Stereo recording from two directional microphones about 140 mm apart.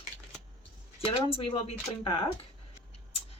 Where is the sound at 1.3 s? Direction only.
40° left (ahead or behind).